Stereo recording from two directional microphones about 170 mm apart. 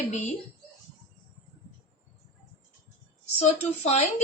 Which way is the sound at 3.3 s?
40° left (ahead or behind).